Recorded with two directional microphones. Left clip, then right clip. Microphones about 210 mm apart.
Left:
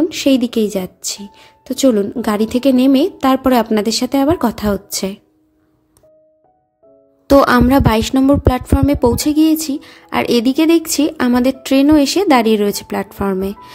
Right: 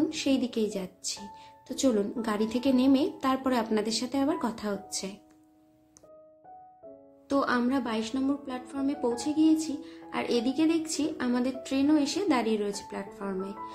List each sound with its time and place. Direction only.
0.1 s speech: 45° left (ahead or behind)
7.2 s speech: 55° left (ahead or behind)